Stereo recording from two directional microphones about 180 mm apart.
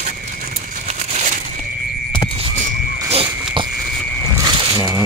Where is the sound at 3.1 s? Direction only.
30° right (ahead or behind).